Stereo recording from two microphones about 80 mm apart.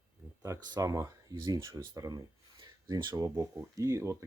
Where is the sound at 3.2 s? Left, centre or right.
Right.